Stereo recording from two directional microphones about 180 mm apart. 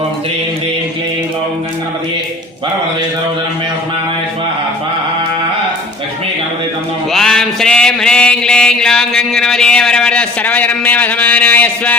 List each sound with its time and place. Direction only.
7.1 s mantra: 5° left (ahead or behind)